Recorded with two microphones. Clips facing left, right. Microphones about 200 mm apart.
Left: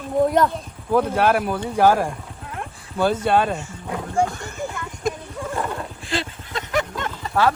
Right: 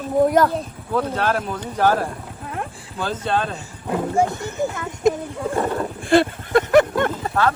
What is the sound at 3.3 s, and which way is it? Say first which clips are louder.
Speech: left 1 dB; 10° left (ahead or behind).